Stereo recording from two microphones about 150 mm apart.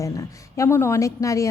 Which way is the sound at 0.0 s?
20° left (ahead or behind).